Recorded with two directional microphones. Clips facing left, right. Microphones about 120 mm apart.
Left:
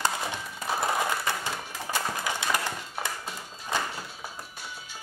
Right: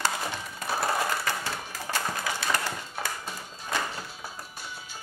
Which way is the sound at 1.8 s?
15° left (ahead or behind).